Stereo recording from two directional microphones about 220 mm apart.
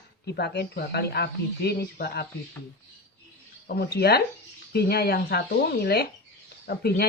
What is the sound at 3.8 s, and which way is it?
Speech, 45° left (ahead or behind).